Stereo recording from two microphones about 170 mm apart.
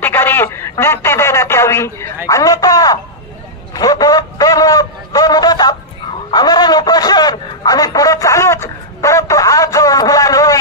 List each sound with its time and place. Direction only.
0.0 s telephone: 10° left (ahead or behind)
2.2 s speech: 20° left (ahead or behind)
6.3 s a sound: 25° left (ahead or behind)